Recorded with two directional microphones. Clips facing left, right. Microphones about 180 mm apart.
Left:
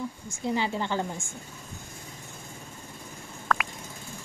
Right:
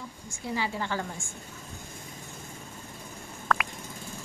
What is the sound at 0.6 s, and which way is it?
Speech, 20° left (ahead or behind).